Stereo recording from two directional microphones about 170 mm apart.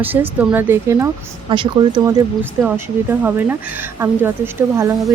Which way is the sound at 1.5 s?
25° right (ahead or behind).